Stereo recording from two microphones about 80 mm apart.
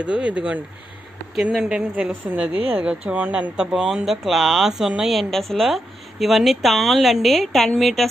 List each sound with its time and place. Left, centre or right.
0.0 s a woman's voice: centre